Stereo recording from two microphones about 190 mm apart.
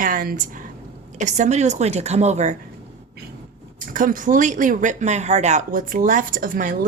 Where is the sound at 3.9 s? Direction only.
45° right (ahead or behind).